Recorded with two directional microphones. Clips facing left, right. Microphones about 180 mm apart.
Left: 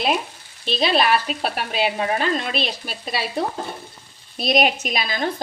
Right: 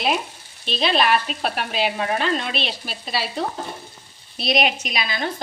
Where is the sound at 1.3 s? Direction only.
5° left (ahead or behind).